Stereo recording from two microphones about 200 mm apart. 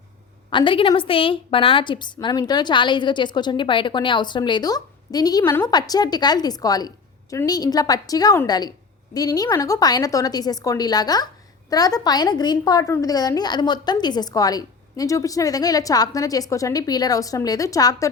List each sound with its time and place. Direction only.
0.5 s a woman's voice: 25° left (ahead or behind)